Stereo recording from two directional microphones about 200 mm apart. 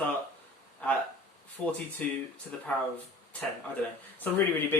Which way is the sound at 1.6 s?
5° left (ahead or behind).